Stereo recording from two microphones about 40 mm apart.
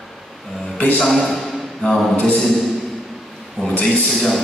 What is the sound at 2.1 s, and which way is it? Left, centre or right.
Speech, left.